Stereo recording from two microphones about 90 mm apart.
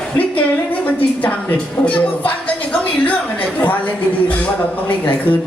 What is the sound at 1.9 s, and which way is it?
Speech, 15° left (ahead or behind).